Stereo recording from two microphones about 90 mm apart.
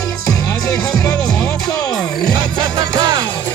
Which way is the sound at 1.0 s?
30° left (ahead or behind).